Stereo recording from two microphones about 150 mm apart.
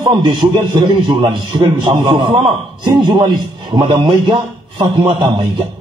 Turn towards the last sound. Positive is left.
turn(degrees=-35)  # may be behind; listen again after turning